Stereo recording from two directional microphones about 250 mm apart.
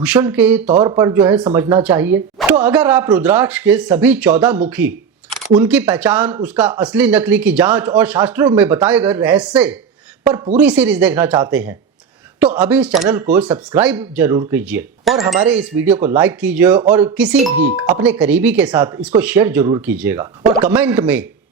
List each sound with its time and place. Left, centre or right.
0.0 s a man's voice: centre
10.2 s speech: centre
10.6 s a man's voice: centre